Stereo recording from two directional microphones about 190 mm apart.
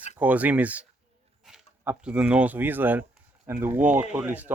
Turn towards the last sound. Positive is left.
turn(degrees=-10)  # may be behind; listen again after turning